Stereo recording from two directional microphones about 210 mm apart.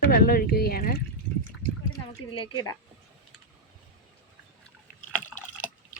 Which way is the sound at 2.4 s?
20° left (ahead or behind).